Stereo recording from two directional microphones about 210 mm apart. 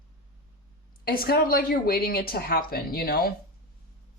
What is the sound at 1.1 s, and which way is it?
Speech, 45° left (ahead or behind).